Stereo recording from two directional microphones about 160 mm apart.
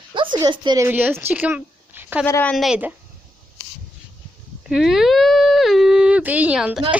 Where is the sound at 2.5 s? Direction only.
5° right (ahead or behind).